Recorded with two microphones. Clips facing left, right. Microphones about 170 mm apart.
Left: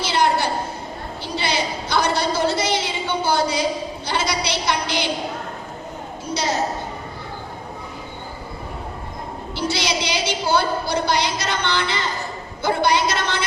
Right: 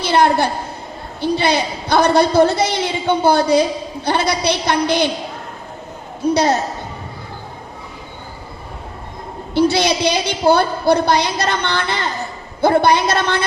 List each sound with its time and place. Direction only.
0.0 s a sound: 55° right (ahead or behind)
1.2 s a woman's voice: 55° right (ahead or behind)
6.3 s a woman's voice: 55° right (ahead or behind)
9.6 s a woman's voice: 55° right (ahead or behind)